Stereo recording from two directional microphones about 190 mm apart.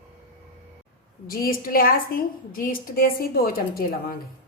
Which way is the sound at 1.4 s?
50° left (ahead or behind).